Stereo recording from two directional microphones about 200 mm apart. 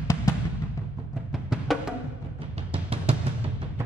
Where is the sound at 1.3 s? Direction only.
5° right (ahead or behind).